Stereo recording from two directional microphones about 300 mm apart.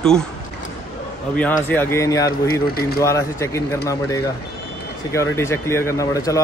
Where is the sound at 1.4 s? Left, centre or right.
Centre.